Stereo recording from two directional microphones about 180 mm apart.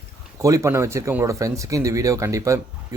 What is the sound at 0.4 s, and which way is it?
Speech, 15° right (ahead or behind).